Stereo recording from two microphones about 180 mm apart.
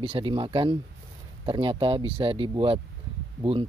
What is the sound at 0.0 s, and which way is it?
Speech, 30° right (ahead or behind).